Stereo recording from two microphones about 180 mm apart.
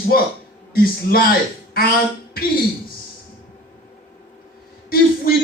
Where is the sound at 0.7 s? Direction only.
55° left (ahead or behind).